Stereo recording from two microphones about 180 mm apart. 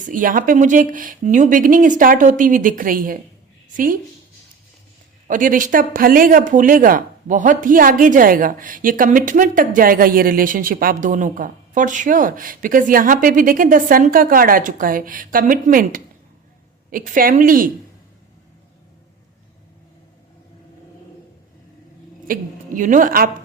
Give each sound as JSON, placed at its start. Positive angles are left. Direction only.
{"t": 0.0, "sound": "speech", "side_deg": -50}
{"t": 5.3, "sound": "speech", "side_deg": -50}
{"t": 22.3, "sound": "a woman's voice", "side_deg": -45}